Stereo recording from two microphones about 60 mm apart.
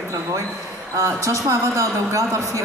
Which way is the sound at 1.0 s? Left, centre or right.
Right.